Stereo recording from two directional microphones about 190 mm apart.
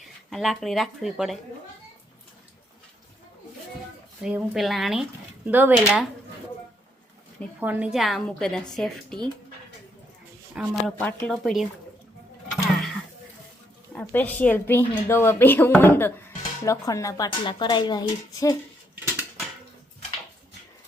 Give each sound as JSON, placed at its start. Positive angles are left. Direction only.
{"t": 0.0, "sound": "speech", "side_deg": 0}
{"t": 4.2, "sound": "a woman's voice", "side_deg": -5}
{"t": 7.6, "sound": "a woman's voice", "side_deg": -10}
{"t": 10.5, "sound": "speech", "side_deg": -5}
{"t": 10.9, "sound": "a woman's voice", "side_deg": 10}
{"t": 12.6, "sound": "a sound", "side_deg": 0}
{"t": 13.9, "sound": "a woman's voice", "side_deg": 10}